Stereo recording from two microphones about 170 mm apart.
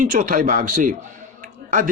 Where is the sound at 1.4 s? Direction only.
50° right (ahead or behind).